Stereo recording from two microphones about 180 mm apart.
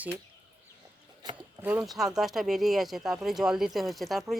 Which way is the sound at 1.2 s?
20° right (ahead or behind).